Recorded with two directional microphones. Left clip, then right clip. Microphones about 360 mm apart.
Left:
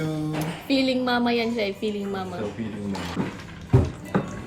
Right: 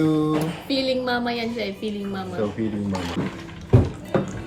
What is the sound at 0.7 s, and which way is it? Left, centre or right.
A woman's voice, centre.